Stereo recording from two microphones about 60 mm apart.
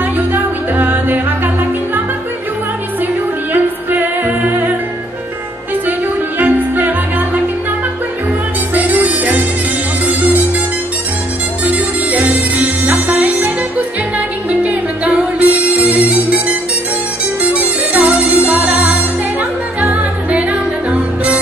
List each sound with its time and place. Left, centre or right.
0.3 s music: right
3.5 s music: right
5.9 s music: right
8.7 s music: right
11.6 s music: right